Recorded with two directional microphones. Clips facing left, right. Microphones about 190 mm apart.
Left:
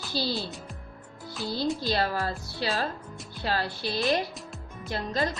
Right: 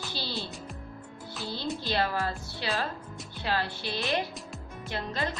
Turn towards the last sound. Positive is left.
turn(degrees=40)  # may be behind; listen again after turning